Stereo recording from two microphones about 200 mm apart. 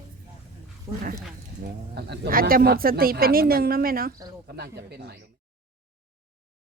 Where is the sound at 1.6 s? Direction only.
50° right (ahead or behind).